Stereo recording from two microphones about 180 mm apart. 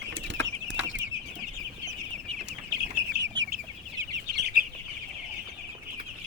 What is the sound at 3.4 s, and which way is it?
Chicken, 90° right.